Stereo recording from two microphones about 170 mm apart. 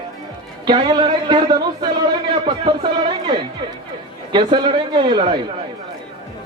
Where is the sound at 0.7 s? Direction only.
25° right (ahead or behind).